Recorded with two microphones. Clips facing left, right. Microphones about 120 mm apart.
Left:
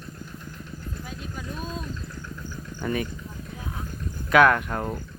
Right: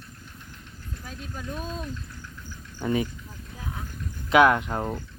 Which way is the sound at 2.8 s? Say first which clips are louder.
Right 2 dB; 20° right (ahead or behind).